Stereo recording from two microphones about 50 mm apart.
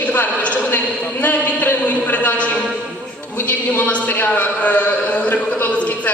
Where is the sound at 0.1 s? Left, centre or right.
Left.